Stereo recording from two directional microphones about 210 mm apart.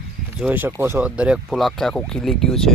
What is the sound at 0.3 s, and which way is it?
Speech, 5° right (ahead or behind).